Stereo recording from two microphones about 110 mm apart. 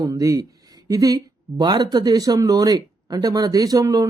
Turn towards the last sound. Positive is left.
turn(degrees=-30)  # may be behind; listen again after turning